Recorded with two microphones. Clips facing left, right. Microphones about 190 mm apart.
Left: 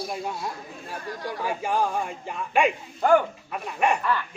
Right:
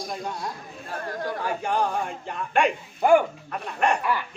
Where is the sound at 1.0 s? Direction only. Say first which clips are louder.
Right 4 dB; 55° right (ahead or behind).